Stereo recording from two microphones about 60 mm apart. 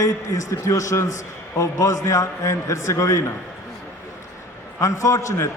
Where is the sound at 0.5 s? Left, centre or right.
Left.